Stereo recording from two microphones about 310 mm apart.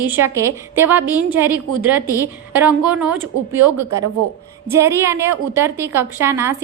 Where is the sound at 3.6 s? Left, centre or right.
Right.